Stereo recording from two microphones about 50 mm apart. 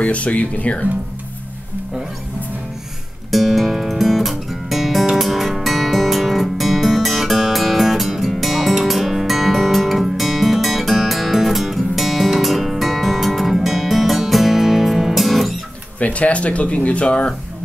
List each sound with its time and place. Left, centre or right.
0.0 s speech: left
3.3 s music: centre
16.0 s speech: left